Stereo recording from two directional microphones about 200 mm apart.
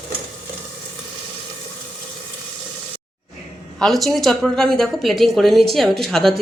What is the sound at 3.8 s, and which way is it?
A woman's voice, centre (ahead or behind).